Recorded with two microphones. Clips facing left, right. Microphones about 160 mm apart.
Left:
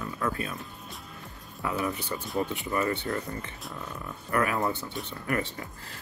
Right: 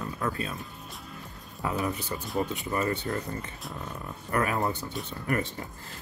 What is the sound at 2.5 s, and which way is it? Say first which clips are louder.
Speech: even; 40° right (ahead or behind).